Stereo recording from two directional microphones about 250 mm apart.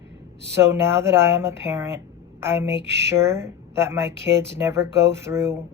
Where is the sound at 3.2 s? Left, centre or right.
Centre.